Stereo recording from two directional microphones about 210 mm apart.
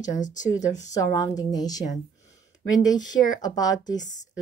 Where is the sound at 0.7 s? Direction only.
15° left (ahead or behind).